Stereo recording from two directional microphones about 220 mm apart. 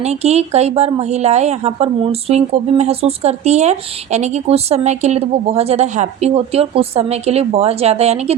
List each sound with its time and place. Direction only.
0.0 s a woman's voice: 30° right (ahead or behind)